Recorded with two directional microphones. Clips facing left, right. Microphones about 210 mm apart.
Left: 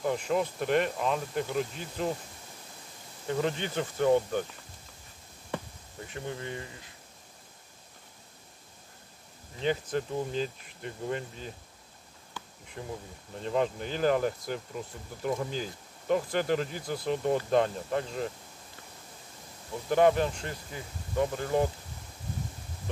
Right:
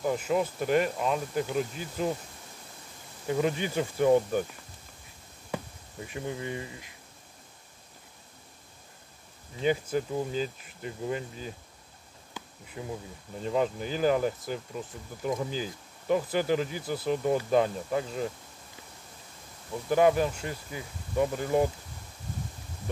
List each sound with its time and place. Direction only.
0.0 s speech: 5° right (ahead or behind)
3.3 s speech: 10° right (ahead or behind)
5.5 s speech: 15° right (ahead or behind)
9.6 s speech: 10° right (ahead or behind)
12.8 s speech: 10° right (ahead or behind)
19.9 s speech: 5° right (ahead or behind)